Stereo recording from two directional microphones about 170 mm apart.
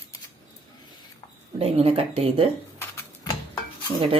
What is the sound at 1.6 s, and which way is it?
Speech, 35° right (ahead or behind).